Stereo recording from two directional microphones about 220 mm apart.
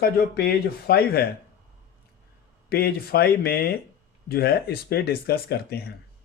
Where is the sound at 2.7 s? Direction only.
45° left (ahead or behind).